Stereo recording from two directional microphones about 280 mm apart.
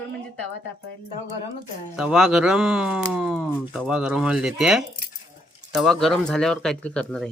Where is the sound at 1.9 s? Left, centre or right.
Centre.